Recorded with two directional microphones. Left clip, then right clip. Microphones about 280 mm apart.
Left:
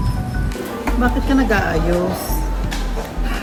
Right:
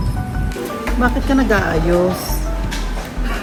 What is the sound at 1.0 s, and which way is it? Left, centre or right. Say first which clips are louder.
Speech: right 2 dB; centre.